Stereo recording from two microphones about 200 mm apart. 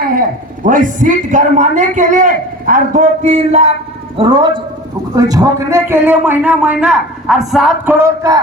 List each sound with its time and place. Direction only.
0.6 s a woman's voice: 40° right (ahead or behind); by 7.9 s centre (ahead or behind)
7.9 s a man's voice: 15° right (ahead or behind)